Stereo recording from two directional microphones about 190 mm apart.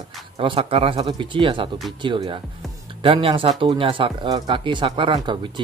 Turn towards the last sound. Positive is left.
turn(degrees=-25)  # may be behind; listen again after turning